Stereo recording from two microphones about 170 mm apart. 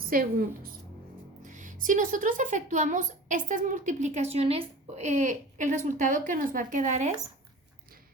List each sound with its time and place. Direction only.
0.0 s a woman's voice: 60° right (ahead or behind)
1.5 s speech: 50° right (ahead or behind)